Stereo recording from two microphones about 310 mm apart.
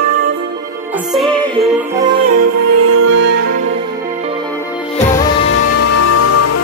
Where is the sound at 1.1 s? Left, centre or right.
Centre.